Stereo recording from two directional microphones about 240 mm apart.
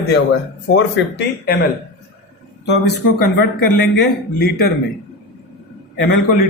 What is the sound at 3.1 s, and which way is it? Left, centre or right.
A man's voice, left.